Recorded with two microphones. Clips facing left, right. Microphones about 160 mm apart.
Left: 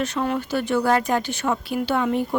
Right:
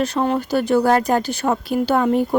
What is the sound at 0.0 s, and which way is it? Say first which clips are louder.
Speech: right 4 dB; 35° right (ahead or behind).